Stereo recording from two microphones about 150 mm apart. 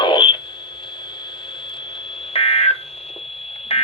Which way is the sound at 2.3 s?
40° left (ahead or behind).